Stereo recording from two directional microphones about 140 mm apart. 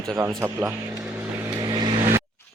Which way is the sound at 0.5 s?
10° right (ahead or behind).